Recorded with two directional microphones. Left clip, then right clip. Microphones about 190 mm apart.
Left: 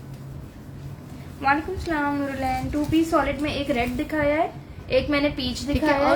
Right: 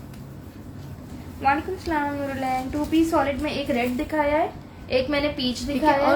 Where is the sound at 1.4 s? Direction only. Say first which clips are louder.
Even; 25° left (ahead or behind).